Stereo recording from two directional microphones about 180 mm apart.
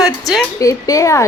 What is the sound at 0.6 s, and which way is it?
Speech, 20° left (ahead or behind).